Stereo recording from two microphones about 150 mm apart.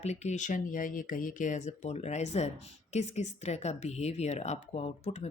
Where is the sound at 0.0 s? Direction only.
50° left (ahead or behind).